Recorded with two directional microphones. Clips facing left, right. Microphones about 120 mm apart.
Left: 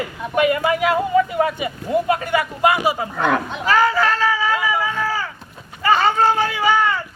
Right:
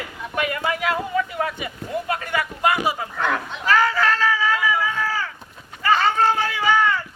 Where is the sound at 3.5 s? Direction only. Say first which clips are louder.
Left 3 dB; 10° left (ahead or behind).